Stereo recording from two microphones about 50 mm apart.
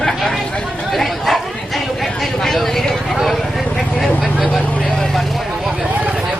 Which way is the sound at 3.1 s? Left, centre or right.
Centre.